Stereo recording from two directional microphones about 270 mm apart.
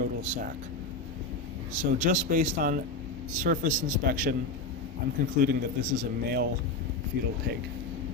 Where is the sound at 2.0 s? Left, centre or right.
Right.